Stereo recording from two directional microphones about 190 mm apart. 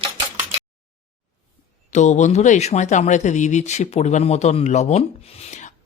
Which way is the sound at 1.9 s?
40° left (ahead or behind).